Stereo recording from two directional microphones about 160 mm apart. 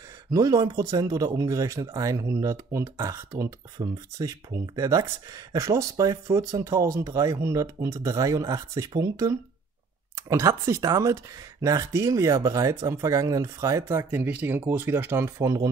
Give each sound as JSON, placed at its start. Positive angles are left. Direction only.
{"t": 0.3, "sound": "speech", "side_deg": -20}